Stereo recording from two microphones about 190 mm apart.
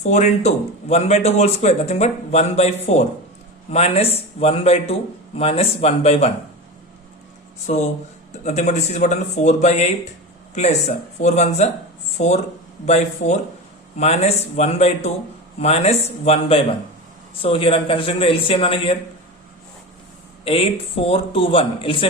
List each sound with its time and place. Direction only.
0.0 s speech: 40° left (ahead or behind)
7.7 s speech: 40° left (ahead or behind)
20.4 s speech: 30° left (ahead or behind)